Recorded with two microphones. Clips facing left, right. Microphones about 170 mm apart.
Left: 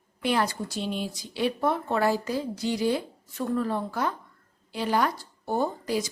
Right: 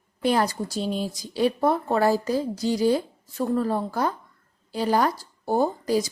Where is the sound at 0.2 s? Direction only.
40° right (ahead or behind).